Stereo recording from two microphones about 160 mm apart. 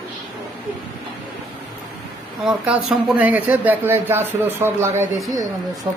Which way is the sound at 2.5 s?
5° right (ahead or behind).